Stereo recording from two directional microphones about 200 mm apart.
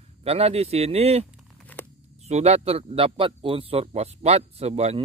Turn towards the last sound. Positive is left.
turn(degrees=-30)  # may be behind; listen again after turning